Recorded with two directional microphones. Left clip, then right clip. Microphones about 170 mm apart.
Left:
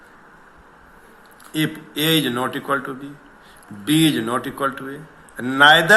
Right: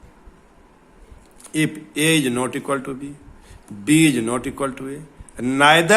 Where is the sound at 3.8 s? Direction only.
90° right.